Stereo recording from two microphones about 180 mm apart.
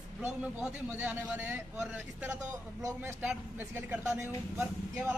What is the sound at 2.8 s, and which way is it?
Speech, 20° right (ahead or behind).